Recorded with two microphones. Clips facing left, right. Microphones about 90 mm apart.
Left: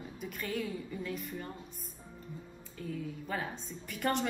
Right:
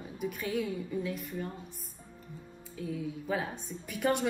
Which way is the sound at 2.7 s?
10° right (ahead or behind).